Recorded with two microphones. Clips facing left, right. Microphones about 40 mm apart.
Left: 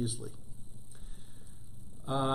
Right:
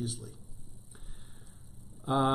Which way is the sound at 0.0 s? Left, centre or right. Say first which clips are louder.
Left 2 dB; centre.